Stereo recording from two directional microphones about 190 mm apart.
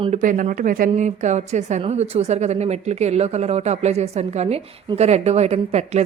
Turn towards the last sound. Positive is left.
turn(degrees=-35)  # may be behind; listen again after turning